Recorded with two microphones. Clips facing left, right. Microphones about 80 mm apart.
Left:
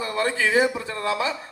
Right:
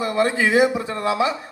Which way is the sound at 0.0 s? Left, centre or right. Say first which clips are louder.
Right 4 dB; right.